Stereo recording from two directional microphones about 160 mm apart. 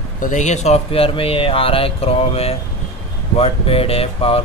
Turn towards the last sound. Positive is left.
turn(degrees=40)  # may be behind; listen again after turning